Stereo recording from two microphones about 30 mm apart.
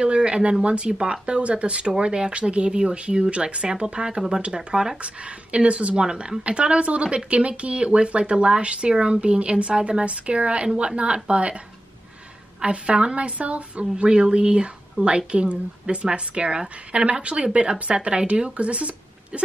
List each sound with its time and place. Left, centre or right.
0.0 s speech: right
0.9 s speech: right
1.2 s a woman's voice: right
5.0 s a woman's voice: right
5.9 s a woman's voice: right
12.6 s a woman's voice: right
14.1 s a woman's voice: right